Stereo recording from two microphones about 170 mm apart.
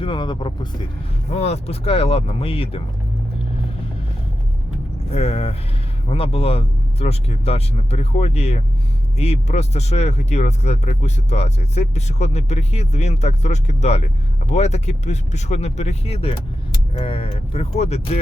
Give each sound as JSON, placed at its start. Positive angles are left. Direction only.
{"t": 0.0, "sound": "speech", "side_deg": 30}
{"t": 1.3, "sound": "speech", "side_deg": 40}
{"t": 5.1, "sound": "speech", "side_deg": 40}